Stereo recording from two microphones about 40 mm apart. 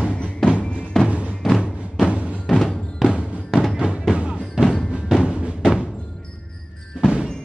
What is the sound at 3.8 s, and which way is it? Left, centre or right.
Music, right.